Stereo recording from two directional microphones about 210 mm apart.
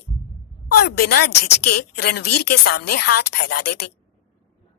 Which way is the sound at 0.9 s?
50° left (ahead or behind).